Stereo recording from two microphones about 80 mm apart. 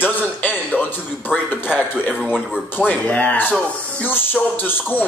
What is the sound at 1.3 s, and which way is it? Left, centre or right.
A man's voice, centre.